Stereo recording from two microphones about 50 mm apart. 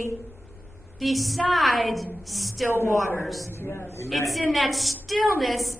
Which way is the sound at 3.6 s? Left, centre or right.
Left.